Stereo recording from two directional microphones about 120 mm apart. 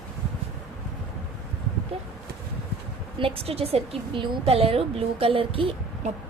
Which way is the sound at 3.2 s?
50° right (ahead or behind).